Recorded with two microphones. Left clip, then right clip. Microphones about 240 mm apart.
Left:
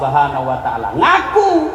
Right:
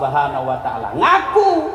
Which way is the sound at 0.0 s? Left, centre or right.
Right.